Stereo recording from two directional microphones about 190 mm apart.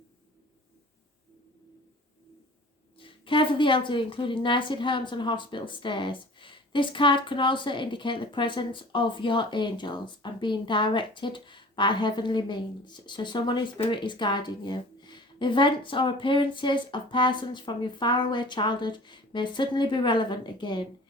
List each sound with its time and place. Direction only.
3.0 s a woman's voice: 25° left (ahead or behind)